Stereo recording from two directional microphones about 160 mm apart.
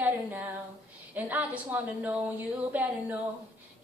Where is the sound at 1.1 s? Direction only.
10° right (ahead or behind).